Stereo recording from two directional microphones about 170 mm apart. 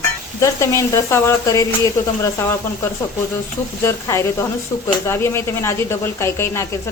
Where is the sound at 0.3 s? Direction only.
15° left (ahead or behind).